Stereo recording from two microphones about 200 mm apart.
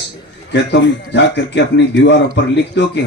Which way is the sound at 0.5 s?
60° left (ahead or behind).